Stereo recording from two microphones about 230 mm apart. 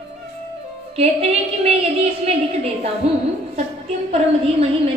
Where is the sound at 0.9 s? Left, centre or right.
Right.